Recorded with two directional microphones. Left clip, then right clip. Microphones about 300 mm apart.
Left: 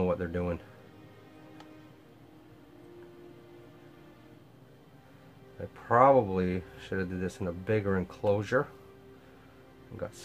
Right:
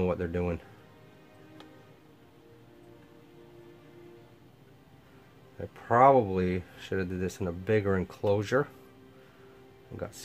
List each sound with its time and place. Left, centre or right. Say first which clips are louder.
0.0 s speech: right 1 dB; centre
5.9 s speech: right 1 dB; centre
9.9 s speech: even; centre